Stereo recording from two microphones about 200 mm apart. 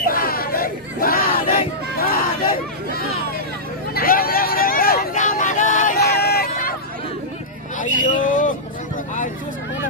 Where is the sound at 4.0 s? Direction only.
45° left (ahead or behind).